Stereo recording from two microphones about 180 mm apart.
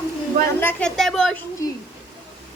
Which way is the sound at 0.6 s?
10° left (ahead or behind).